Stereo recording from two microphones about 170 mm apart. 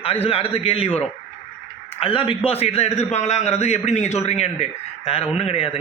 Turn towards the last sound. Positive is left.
turn(degrees=35)  # may be behind; listen again after turning